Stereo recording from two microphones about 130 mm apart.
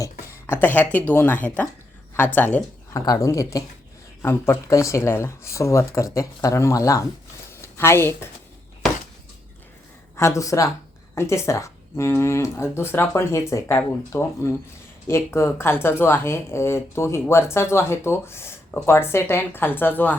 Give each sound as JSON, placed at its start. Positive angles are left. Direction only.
{"t": 0.0, "sound": "speech", "side_deg": 20}
{"t": 2.9, "sound": "speech", "side_deg": 25}
{"t": 7.5, "sound": "a sound", "side_deg": 20}
{"t": 10.2, "sound": "speech", "side_deg": 25}